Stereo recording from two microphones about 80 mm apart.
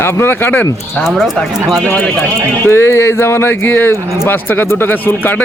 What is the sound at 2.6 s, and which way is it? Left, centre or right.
Speech, left.